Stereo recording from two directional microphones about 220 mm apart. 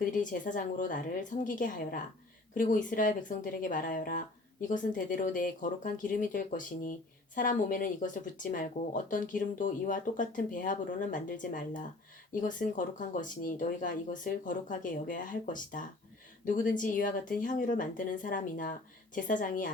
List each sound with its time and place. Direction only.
0.0 s speech: 35° left (ahead or behind)